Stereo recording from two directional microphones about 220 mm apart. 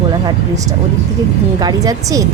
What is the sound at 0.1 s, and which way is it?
A woman's voice, 20° right (ahead or behind).